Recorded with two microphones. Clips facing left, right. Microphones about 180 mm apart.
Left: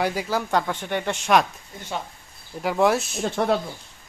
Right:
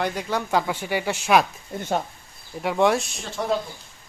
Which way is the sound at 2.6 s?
Centre (ahead or behind).